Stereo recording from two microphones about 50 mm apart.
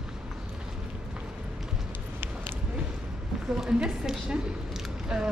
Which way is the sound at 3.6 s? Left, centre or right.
Centre.